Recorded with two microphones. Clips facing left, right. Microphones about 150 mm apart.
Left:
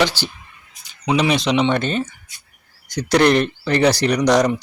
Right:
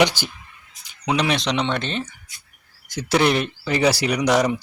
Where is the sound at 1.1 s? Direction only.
Centre (ahead or behind).